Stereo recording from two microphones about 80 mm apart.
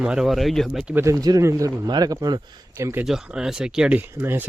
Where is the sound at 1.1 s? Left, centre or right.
Right.